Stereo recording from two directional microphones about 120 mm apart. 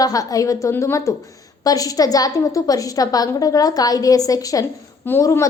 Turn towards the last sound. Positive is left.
turn(degrees=25)  # may be behind; listen again after turning